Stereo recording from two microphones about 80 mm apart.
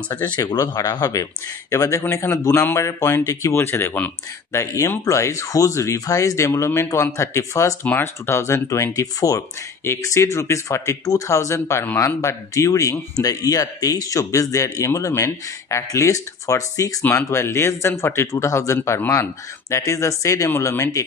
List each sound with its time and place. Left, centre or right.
0.5 s speech: left
4.5 s speech: left
9.8 s speech: left
17.2 s speech: left